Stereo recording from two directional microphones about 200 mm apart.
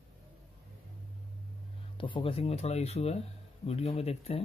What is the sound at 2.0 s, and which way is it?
Speech, 25° left (ahead or behind).